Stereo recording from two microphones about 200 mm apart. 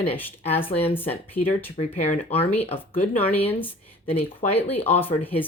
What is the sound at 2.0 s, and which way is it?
Speech, 30° left (ahead or behind).